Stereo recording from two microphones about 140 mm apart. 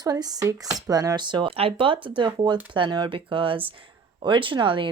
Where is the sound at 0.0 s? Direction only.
25° right (ahead or behind).